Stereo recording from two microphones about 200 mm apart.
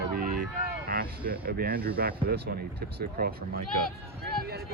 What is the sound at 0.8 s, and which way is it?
Speech, 45° right (ahead or behind).